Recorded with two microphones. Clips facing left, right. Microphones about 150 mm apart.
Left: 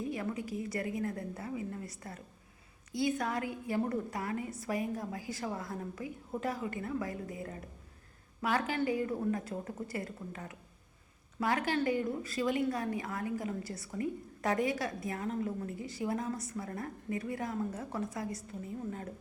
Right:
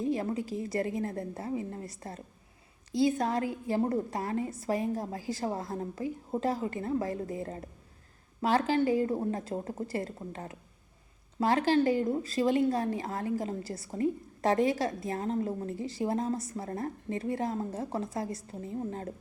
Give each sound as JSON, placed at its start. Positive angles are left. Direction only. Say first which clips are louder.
{"t": 0.0, "sound": "speech", "louder": "right 6 dB", "side_deg": -30}